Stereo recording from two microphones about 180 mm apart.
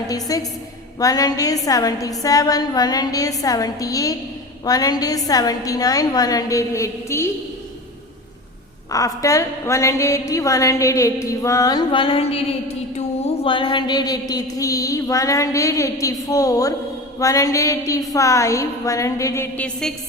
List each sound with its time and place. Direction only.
0.1 s a woman's voice: 20° left (ahead or behind)
8.9 s a woman's voice: 20° left (ahead or behind)